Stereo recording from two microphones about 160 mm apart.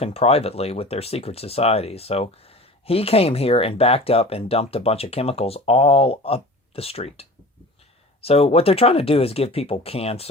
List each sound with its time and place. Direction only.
0.0 s speech: 40° left (ahead or behind)